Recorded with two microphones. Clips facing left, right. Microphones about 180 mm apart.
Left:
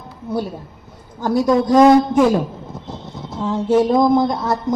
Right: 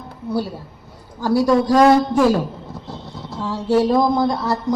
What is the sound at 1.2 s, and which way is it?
Speech, 20° left (ahead or behind).